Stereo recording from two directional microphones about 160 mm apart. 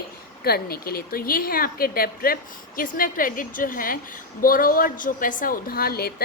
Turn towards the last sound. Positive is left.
turn(degrees=75)  # may be behind; listen again after turning